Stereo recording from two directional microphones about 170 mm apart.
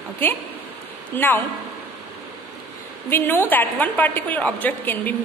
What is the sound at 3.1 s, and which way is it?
A woman's voice, 10° left (ahead or behind).